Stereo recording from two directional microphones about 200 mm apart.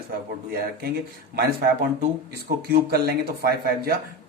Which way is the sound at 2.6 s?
50° right (ahead or behind).